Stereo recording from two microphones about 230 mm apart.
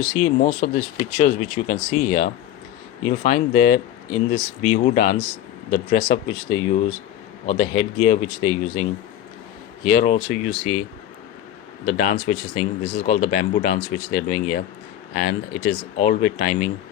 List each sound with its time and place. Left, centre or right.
0.1 s speech: left
7.4 s speech: left
11.9 s speech: left